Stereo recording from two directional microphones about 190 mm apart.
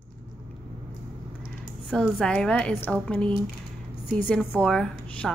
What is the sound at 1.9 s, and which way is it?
A child's voice, centre (ahead or behind).